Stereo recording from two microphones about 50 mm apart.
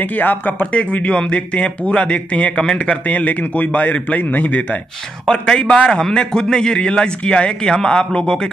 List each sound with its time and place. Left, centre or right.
0.0 s a man's voice: left
0.7 s a man's voice: left
5.2 s a man's voice: centre